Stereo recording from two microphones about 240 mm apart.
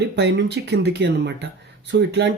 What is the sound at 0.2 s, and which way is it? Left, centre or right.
Speech, right.